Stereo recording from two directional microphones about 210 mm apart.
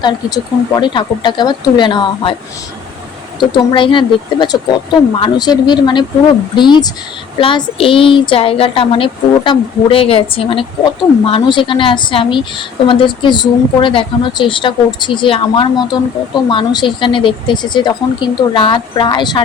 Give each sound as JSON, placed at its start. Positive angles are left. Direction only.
{"t": 0.0, "sound": "a woman's voice", "side_deg": 20}
{"t": 3.5, "sound": "a woman's voice", "side_deg": 20}